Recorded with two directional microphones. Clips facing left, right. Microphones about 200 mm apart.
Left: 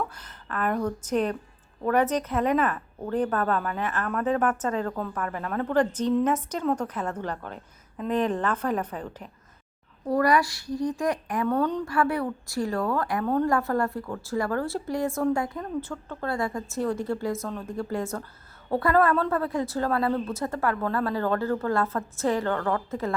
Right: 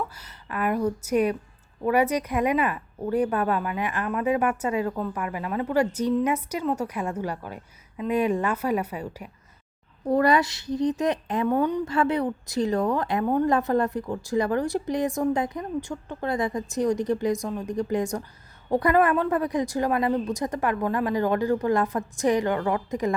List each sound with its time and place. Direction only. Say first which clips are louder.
0.0 s a woman's voice: even; 10° right (ahead or behind)
10.1 s a woman's voice: right 2 dB; 25° right (ahead or behind)